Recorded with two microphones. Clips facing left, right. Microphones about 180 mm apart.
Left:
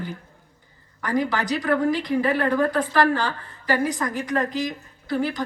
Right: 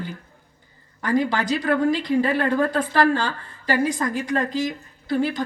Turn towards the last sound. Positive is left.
turn(degrees=-25)  # may be behind; listen again after turning